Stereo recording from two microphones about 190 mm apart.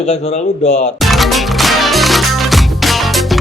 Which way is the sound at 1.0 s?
Centre (ahead or behind).